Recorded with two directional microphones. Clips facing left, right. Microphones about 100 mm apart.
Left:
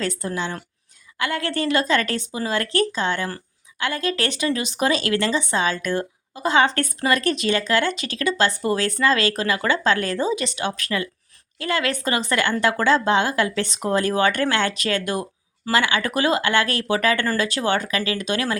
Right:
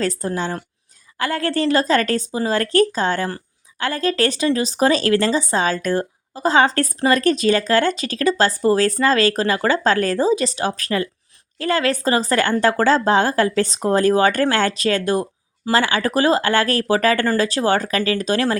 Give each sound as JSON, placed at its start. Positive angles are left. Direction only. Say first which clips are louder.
{"t": 0.0, "sound": "speech", "louder": "right 4 dB", "side_deg": -35}